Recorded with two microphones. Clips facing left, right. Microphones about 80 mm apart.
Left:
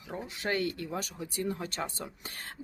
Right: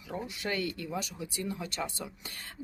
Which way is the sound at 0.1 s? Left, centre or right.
Left.